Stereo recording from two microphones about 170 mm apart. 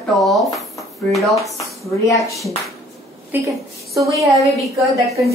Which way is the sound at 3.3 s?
10° right (ahead or behind).